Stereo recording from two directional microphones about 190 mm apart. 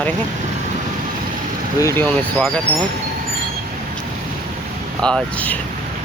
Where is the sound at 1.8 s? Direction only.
10° left (ahead or behind).